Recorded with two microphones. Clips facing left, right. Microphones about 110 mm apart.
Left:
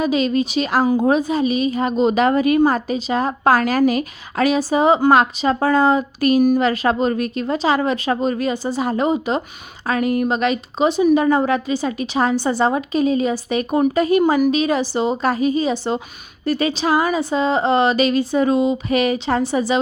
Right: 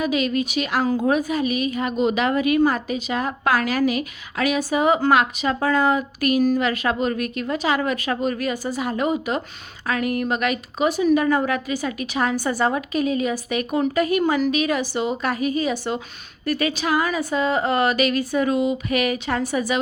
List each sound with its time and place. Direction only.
0.0 s a woman's voice: 30° left (ahead or behind)